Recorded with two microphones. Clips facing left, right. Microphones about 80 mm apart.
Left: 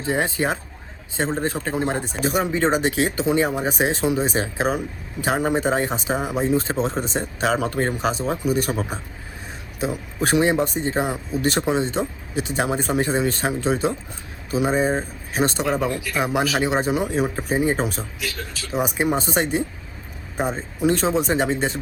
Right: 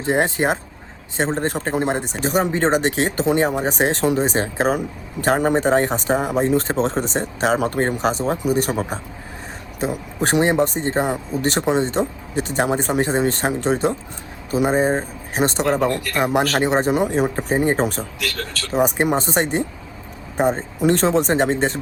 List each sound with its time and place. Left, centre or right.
0.1 s speech: right
1.7 s speech: right
2.2 s speech: right
6.7 s speech: right
10.2 s speech: right
15.9 s speech: right
18.2 s a man's voice: right
18.7 s speech: right
20.8 s speech: right